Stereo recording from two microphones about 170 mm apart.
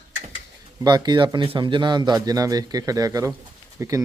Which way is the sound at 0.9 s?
25° right (ahead or behind).